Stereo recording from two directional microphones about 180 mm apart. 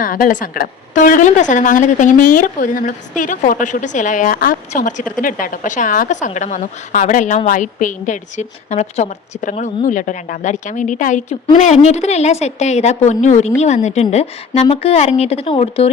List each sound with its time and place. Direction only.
0.0 s a woman's voice: 50° left (ahead or behind); by 15.9 s 30° left (ahead or behind)